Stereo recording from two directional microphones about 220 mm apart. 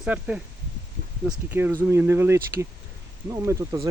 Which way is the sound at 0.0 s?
5° right (ahead or behind).